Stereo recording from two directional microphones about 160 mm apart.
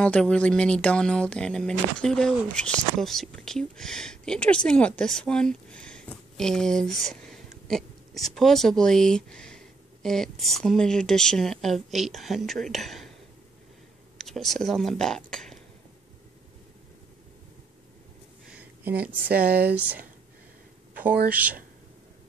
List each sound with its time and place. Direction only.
0.0 s speech: 5° left (ahead or behind)
14.1 s speech: centre (ahead or behind)
18.5 s speech: 10° right (ahead or behind)
19.5 s speech: 85° right
19.8 s speech: 10° right (ahead or behind)
21.3 s speech: 10° right (ahead or behind)